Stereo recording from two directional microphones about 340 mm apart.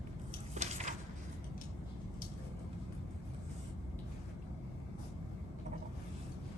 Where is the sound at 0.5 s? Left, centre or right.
Centre.